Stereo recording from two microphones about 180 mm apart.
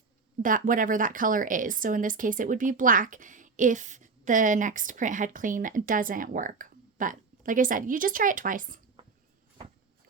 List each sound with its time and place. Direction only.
0.4 s speech: 50° right (ahead or behind)